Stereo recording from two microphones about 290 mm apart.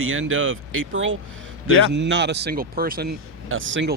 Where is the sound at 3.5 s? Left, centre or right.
Right.